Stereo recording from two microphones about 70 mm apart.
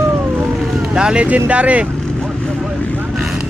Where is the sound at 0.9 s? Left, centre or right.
Centre.